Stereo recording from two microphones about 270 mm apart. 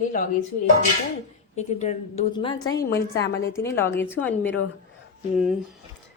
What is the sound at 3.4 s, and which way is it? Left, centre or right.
Speech, centre.